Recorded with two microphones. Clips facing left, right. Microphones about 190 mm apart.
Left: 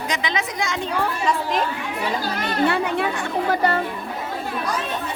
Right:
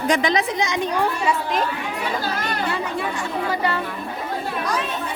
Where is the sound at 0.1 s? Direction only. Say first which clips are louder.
Right 7 dB; 45° right (ahead or behind).